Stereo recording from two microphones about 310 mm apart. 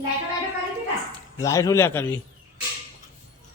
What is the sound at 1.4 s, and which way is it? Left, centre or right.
Speech, centre.